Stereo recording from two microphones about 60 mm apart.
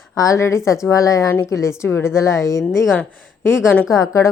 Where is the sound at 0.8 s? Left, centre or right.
Left.